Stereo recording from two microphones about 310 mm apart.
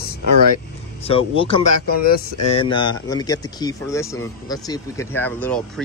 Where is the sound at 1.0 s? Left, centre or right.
Centre.